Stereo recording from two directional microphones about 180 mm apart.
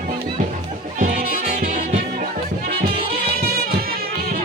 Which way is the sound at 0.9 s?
45° right (ahead or behind).